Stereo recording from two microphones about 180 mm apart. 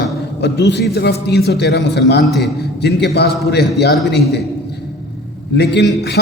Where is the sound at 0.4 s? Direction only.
70° left (ahead or behind).